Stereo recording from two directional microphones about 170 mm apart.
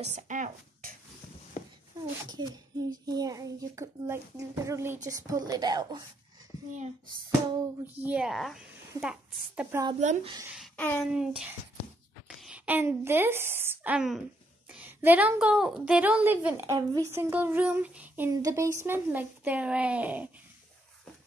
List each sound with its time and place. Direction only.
0.0 s speech: 45° right (ahead or behind)
2.2 s a child's voice: 20° right (ahead or behind)
7.8 s speech: 10° right (ahead or behind)
9.7 s a child's voice: 20° right (ahead or behind)
9.9 s speech: 45° right (ahead or behind)
10.8 s a sound: 10° left (ahead or behind)
12.4 s a woman's voice: 5° right (ahead or behind)